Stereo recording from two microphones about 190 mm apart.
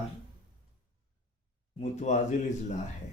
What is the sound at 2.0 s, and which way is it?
Speech, 40° left (ahead or behind).